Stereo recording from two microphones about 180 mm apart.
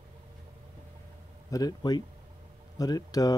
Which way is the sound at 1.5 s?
20° left (ahead or behind).